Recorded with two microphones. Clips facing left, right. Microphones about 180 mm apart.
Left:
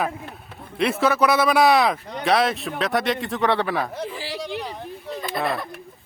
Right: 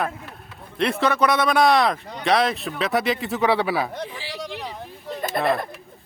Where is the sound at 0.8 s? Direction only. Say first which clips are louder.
Left 1 dB; 5° left (ahead or behind).